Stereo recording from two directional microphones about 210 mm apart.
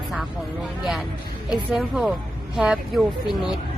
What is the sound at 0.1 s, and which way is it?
Speech, centre (ahead or behind).